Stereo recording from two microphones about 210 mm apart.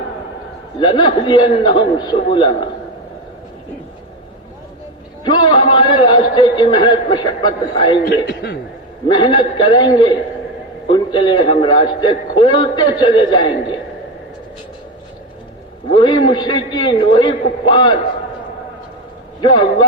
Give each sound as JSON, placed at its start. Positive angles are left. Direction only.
{"t": 0.8, "sound": "a man's voice", "side_deg": 20}
{"t": 5.2, "sound": "a man's voice", "side_deg": 20}
{"t": 8.0, "sound": "a man's voice", "side_deg": 50}
{"t": 9.0, "sound": "a man's voice", "side_deg": 20}
{"t": 15.9, "sound": "a man's voice", "side_deg": 20}
{"t": 19.4, "sound": "a man's voice", "side_deg": 20}